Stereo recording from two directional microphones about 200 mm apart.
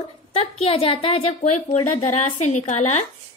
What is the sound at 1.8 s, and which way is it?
Speech, 90° left.